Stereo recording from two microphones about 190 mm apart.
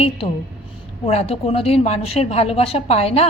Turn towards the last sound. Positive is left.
turn(degrees=35)  # may be behind; listen again after turning